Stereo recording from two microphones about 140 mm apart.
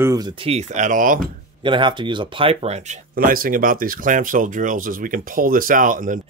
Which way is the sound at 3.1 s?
90° right.